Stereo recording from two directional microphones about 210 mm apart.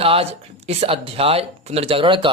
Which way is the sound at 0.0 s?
25° right (ahead or behind).